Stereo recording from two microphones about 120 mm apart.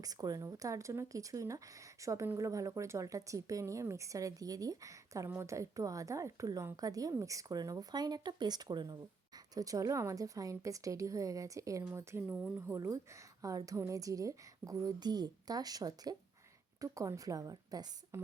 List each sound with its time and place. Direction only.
0.0 s speech: 30° right (ahead or behind)
18.1 s speech: 20° right (ahead or behind)